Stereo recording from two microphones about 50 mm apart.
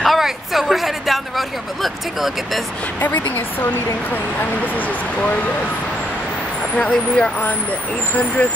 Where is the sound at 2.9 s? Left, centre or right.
Left.